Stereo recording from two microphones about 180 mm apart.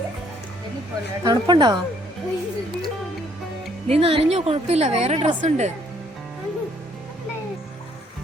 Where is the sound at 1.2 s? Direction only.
20° right (ahead or behind).